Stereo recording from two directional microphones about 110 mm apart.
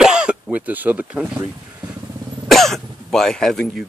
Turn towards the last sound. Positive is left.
turn(degrees=5)  # may be behind; listen again after turning